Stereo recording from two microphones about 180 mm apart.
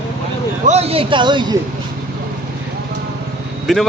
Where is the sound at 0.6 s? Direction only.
35° right (ahead or behind).